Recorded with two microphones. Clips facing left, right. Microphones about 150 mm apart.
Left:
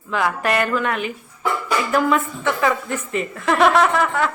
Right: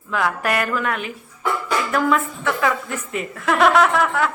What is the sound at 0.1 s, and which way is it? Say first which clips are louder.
A woman's voice: left 1 dB; centre (ahead or behind).